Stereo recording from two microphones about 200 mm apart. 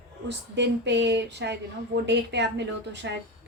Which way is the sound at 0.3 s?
60° right (ahead or behind).